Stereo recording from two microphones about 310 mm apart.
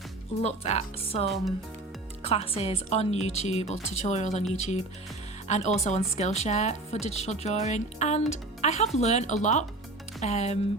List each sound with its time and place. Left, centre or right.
0.4 s speech: left